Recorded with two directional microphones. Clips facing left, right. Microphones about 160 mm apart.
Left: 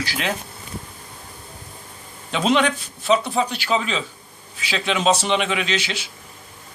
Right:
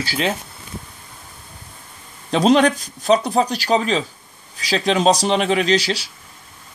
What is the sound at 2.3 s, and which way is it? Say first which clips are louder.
Speech: right 5 dB; 40° right (ahead or behind).